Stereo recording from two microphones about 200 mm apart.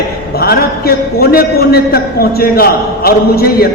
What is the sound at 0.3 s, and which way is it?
A man's voice, 50° left (ahead or behind).